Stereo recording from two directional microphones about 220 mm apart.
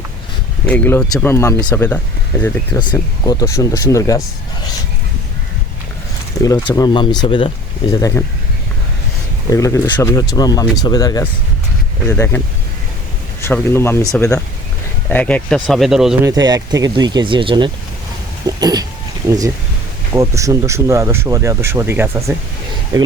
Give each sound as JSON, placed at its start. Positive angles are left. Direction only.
{"t": 0.7, "sound": "speech", "side_deg": 5}
{"t": 6.4, "sound": "speech", "side_deg": 15}
{"t": 9.5, "sound": "speech", "side_deg": 15}
{"t": 13.4, "sound": "speech", "side_deg": 10}
{"t": 16.2, "sound": "speech", "side_deg": -15}
{"t": 20.1, "sound": "speech", "side_deg": -15}